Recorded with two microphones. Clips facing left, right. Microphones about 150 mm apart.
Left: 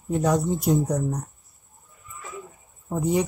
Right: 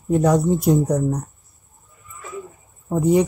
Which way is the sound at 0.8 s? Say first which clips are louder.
Right 5 dB; 70° right (ahead or behind).